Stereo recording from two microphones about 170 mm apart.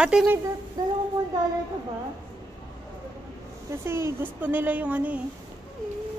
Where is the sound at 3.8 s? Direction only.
15° right (ahead or behind).